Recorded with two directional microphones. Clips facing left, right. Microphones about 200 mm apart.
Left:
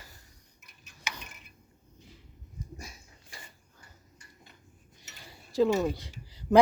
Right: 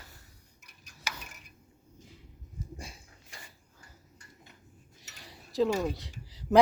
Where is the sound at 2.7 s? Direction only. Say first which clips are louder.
Right 1 dB; 30° right (ahead or behind).